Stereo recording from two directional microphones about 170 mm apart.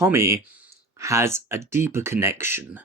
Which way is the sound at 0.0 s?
15° right (ahead or behind).